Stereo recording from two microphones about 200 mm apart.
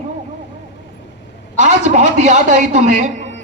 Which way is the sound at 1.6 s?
35° right (ahead or behind).